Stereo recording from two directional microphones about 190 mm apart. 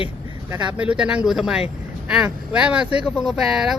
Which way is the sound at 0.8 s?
5° right (ahead or behind).